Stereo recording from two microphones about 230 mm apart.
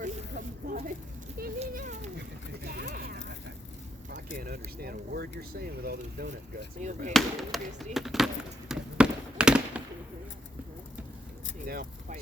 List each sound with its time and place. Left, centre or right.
0.0 s a sound: right
2.6 s clip-clop: right
4.1 s speech: right
6.7 s speech: right
7.1 s speech: centre
8.7 s a sound: centre
11.6 s speech: right